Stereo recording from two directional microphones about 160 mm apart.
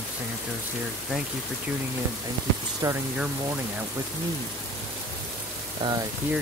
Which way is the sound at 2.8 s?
25° right (ahead or behind).